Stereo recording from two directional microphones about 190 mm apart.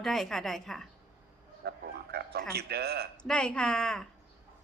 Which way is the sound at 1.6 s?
55° right (ahead or behind).